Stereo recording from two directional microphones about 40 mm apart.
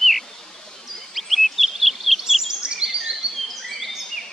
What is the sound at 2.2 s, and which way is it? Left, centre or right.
Bird vocalization, centre.